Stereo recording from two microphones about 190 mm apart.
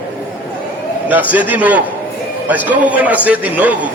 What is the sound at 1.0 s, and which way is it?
A man's voice, 10° right (ahead or behind).